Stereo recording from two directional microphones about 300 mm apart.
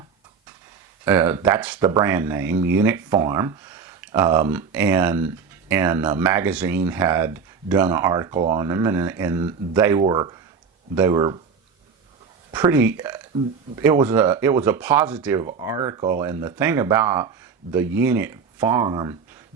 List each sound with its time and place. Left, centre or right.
1.0 s speech: centre
12.5 s speech: centre